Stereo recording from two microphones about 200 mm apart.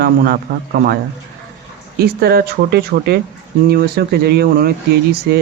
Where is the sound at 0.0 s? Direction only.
50° right (ahead or behind).